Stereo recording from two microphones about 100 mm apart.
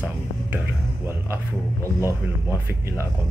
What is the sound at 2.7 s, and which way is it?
Speech, 25° right (ahead or behind).